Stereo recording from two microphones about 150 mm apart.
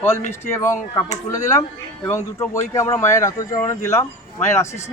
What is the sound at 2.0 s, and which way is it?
Speech, 20° left (ahead or behind).